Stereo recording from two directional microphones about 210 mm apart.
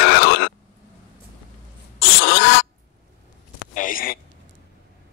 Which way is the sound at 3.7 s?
40° left (ahead or behind).